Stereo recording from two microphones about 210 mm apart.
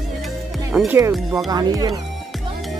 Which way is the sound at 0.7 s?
5° right (ahead or behind).